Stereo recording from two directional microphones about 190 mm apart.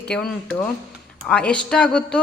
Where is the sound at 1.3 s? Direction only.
5° left (ahead or behind).